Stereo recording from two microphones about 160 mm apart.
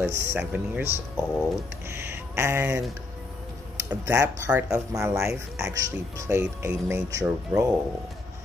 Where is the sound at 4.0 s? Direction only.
20° right (ahead or behind).